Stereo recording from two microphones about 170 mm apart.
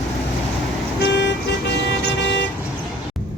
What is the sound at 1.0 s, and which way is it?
Vehicle, 90° left.